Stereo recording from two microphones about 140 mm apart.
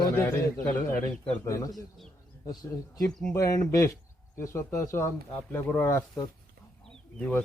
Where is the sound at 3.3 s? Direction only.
20° left (ahead or behind).